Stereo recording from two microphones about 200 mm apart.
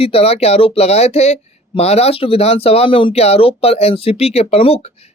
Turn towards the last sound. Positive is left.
turn(degrees=30)  # may be behind; listen again after turning